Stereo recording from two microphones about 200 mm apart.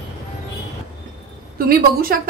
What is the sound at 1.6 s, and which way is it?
Speech, 45° right (ahead or behind).